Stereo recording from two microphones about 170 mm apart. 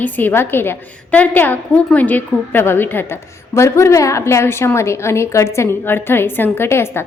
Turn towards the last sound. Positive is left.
turn(degrees=15)  # may be behind; listen again after turning